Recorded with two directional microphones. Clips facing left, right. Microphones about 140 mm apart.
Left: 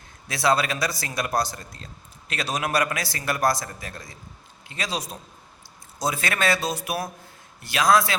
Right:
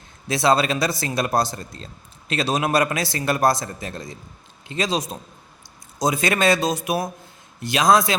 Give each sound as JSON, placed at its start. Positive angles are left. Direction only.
{"t": 0.3, "sound": "speech", "side_deg": -25}